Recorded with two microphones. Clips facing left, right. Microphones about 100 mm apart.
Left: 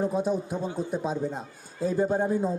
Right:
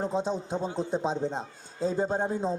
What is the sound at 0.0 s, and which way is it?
A man's voice, 25° right (ahead or behind).